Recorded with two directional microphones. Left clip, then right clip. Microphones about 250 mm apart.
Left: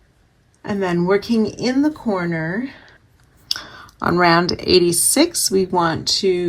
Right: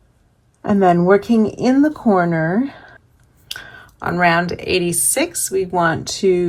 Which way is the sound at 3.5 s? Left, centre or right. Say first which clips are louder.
Left 5 dB; left.